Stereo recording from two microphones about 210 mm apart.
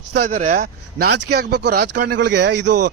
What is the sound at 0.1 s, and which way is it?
Speech, 40° right (ahead or behind).